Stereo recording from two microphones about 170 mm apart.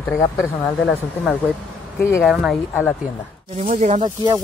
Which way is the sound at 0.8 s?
Centre (ahead or behind).